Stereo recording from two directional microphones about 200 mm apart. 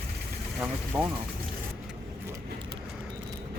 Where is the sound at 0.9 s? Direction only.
20° right (ahead or behind).